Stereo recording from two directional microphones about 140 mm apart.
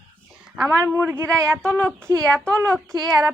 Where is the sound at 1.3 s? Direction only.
5° left (ahead or behind).